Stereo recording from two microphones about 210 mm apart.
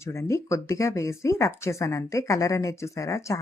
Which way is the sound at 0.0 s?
15° left (ahead or behind).